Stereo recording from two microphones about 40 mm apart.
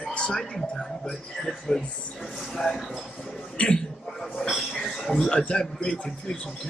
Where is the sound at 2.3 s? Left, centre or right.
Centre.